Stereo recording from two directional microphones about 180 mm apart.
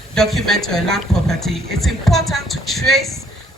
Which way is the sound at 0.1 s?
Centre (ahead or behind).